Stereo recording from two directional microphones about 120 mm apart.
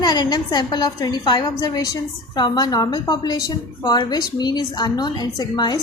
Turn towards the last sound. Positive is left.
turn(degrees=35)  # may be behind; listen again after turning